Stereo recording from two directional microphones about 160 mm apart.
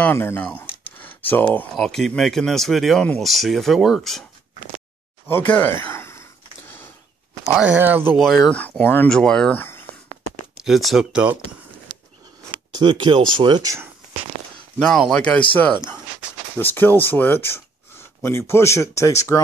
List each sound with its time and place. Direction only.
0.0 s speech: 15° left (ahead or behind)
5.3 s speech: 10° left (ahead or behind)
7.4 s speech: 5° right (ahead or behind)
8.2 s speech: centre (ahead or behind)
10.6 s speech: centre (ahead or behind)
12.7 s speech: 30° right (ahead or behind)
14.8 s speech: 5° left (ahead or behind)
16.5 s speech: 10° left (ahead or behind)
17.9 s a sound: 15° left (ahead or behind)
18.5 s speech: 15° left (ahead or behind)